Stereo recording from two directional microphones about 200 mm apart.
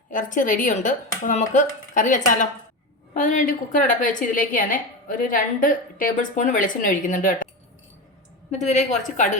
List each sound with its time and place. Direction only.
0.1 s a woman's voice: 40° left (ahead or behind)
8.4 s a woman's voice: 35° left (ahead or behind)